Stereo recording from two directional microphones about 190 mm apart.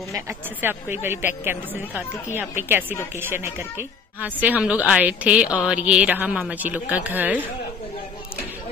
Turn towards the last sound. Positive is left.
turn(degrees=-10)  # may be behind; listen again after turning